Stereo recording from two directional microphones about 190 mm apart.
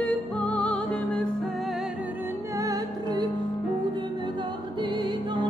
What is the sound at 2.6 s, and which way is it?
Music, 20° right (ahead or behind).